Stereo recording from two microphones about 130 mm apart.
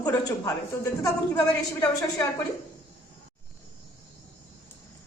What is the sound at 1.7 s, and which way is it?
Speech, 25° left (ahead or behind).